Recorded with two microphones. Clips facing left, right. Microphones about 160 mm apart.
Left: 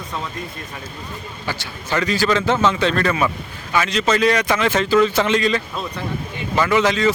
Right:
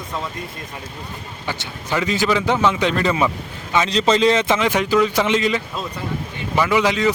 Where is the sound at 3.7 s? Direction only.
25° right (ahead or behind).